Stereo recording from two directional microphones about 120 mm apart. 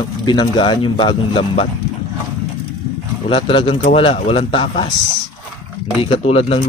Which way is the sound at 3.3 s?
50° left (ahead or behind).